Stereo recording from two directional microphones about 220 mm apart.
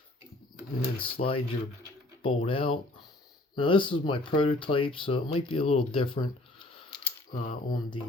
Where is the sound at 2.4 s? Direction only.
25° left (ahead or behind).